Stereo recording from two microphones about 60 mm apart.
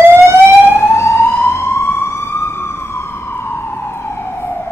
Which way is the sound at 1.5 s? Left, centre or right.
Left.